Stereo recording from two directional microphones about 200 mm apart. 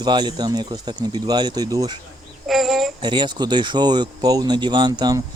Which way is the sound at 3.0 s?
25° right (ahead or behind).